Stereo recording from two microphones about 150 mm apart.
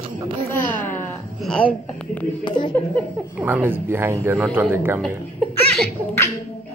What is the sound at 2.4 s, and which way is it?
Speech, 30° left (ahead or behind).